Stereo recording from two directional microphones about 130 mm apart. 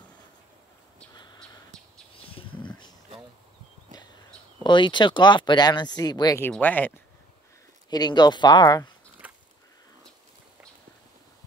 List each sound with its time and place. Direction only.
1.1 s crow: 35° left (ahead or behind)
2.1 s a sound: 45° left (ahead or behind)
4.6 s speech: 35° left (ahead or behind)
6.5 s speech: 15° left (ahead or behind)
7.9 s speech: 30° left (ahead or behind)
9.2 s a sound: 10° right (ahead or behind)